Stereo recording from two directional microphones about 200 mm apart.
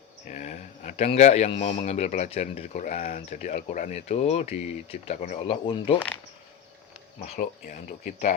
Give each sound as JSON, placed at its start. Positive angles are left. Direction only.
{"t": 0.3, "sound": "speech", "side_deg": 35}
{"t": 7.3, "sound": "speech", "side_deg": 40}